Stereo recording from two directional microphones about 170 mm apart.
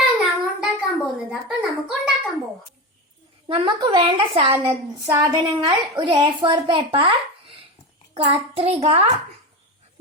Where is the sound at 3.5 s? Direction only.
30° right (ahead or behind).